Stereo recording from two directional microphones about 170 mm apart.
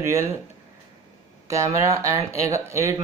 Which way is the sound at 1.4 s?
20° right (ahead or behind).